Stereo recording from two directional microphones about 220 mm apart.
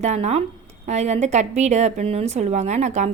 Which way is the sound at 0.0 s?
30° right (ahead or behind).